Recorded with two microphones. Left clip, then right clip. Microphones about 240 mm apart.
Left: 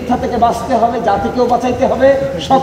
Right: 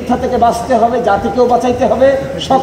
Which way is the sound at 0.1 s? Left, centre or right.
Right.